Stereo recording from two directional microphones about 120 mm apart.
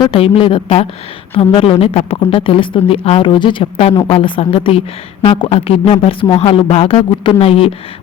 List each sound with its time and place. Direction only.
0.1 s a woman's voice: 50° left (ahead or behind)